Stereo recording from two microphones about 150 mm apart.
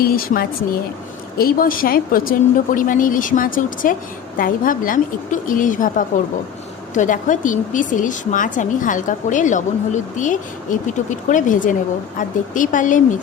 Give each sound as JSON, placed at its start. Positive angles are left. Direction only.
{"t": 0.0, "sound": "speech", "side_deg": 80}